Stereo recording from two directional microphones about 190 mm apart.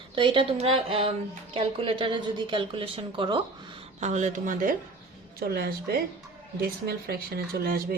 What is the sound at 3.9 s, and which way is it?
Speech, 40° right (ahead or behind).